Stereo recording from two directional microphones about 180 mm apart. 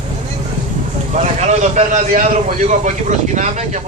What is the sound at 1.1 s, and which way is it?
Speech, 40° right (ahead or behind).